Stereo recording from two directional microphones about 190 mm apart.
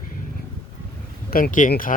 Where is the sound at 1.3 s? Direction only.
45° left (ahead or behind).